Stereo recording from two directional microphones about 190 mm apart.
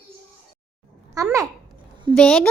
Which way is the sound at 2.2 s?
5° left (ahead or behind).